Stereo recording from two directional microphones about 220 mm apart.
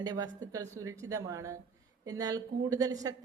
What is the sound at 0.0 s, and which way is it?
A woman's voice, 20° right (ahead or behind).